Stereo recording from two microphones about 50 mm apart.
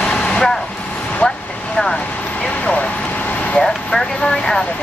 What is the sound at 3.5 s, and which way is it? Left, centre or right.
Vehicle, centre.